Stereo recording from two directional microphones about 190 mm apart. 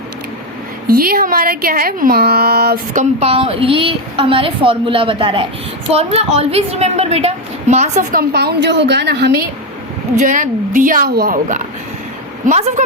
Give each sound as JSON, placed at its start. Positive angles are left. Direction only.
{"t": 0.9, "sound": "speech", "side_deg": -50}
{"t": 8.3, "sound": "a woman's voice", "side_deg": -60}
{"t": 10.2, "sound": "a woman's voice", "side_deg": -40}